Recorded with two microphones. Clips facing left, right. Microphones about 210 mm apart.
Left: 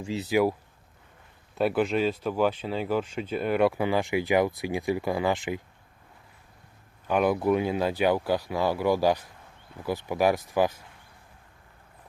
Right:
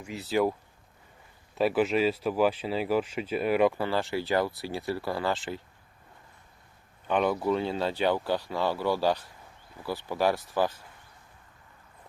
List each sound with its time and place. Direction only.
0.0 s speech: 25° left (ahead or behind)
0.3 s speech: 10° left (ahead or behind)
1.5 s speech: centre (ahead or behind)
3.8 s speech: 15° left (ahead or behind)
7.1 s speech: 10° left (ahead or behind)